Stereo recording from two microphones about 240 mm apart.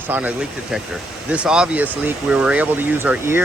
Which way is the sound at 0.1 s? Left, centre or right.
Centre.